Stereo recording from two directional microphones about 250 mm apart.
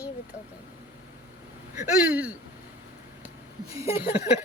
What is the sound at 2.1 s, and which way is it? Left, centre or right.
Speech, centre.